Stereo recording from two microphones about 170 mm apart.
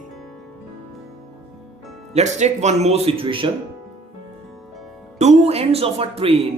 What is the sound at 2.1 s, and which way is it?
Speech, 40° right (ahead or behind).